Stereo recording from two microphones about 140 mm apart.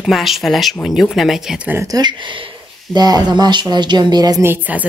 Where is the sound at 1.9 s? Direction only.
25° right (ahead or behind).